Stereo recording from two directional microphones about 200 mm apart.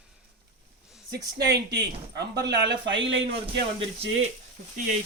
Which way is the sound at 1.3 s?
55° right (ahead or behind).